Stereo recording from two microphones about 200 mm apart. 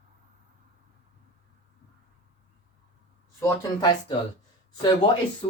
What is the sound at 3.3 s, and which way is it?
Speech, 15° left (ahead or behind).